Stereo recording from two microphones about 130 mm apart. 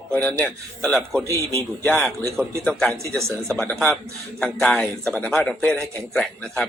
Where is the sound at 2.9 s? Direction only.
20° right (ahead or behind).